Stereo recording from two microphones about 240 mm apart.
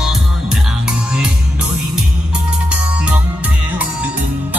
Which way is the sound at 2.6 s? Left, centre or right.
Centre.